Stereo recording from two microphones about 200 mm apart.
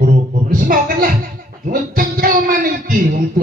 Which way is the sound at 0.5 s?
45° right (ahead or behind).